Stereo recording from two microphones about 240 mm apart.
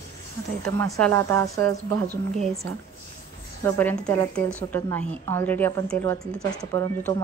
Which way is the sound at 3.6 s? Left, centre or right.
Centre.